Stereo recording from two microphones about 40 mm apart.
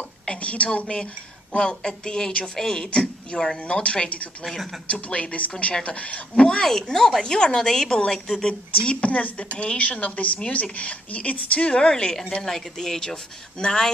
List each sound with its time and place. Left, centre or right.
0.4 s speech: left
1.6 s a woman's voice: centre
6.4 s speech: centre
9.0 s speech: left
11.9 s speech: centre